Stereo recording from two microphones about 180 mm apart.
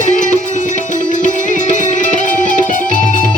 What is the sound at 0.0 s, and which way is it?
Music, 45° left (ahead or behind).